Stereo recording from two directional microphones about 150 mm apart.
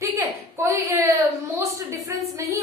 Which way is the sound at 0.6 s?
20° right (ahead or behind).